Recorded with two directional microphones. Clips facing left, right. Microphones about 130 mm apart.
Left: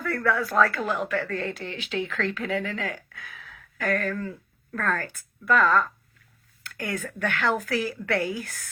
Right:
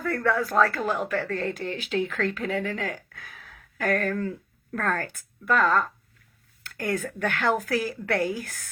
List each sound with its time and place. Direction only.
0.2 s speech: 30° right (ahead or behind)
0.8 s speech: centre (ahead or behind)
1.1 s speech: 40° right (ahead or behind)